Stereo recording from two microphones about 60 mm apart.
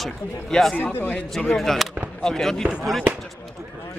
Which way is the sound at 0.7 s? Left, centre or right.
Left.